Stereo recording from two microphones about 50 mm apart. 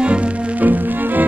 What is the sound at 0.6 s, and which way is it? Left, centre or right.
Music, right.